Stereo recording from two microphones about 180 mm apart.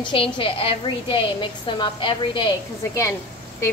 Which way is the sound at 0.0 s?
30° left (ahead or behind).